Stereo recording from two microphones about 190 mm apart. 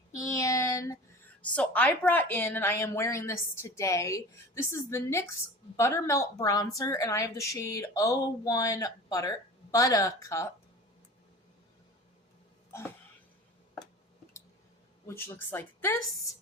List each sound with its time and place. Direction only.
0.1 s a sound: 15° left (ahead or behind)
1.4 s a woman's voice: 5° left (ahead or behind)
15.0 s a woman's voice: 15° left (ahead or behind)